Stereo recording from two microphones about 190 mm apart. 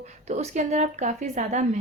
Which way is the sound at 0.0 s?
35° right (ahead or behind).